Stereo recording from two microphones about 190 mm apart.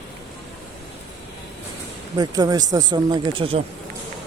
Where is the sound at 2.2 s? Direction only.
20° right (ahead or behind).